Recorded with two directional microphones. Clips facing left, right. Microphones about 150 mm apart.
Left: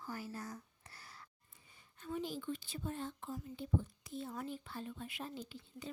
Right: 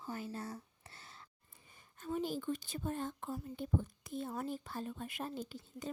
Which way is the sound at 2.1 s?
45° right (ahead or behind).